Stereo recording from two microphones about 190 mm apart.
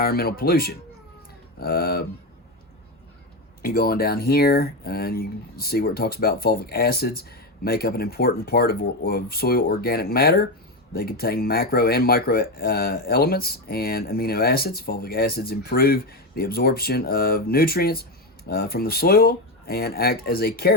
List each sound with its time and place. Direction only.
0.0 s speech: 50° left (ahead or behind)
3.6 s speech: 55° left (ahead or behind)